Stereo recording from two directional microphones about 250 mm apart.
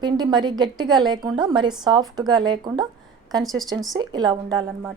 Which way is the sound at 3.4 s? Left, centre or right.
Centre.